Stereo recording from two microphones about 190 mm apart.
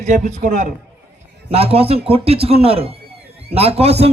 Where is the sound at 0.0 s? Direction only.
40° right (ahead or behind).